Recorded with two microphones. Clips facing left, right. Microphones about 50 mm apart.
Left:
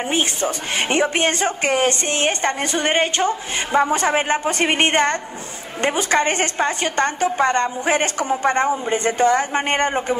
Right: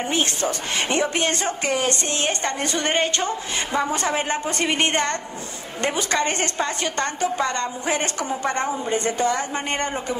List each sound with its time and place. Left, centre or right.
0.0 s a woman's voice: centre; by 10.1 s left